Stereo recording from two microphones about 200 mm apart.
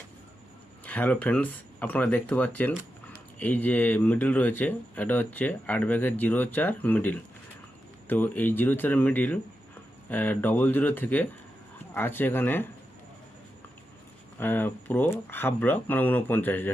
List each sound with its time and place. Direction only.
0.9 s speech: 10° left (ahead or behind)
14.3 s speech: 10° left (ahead or behind)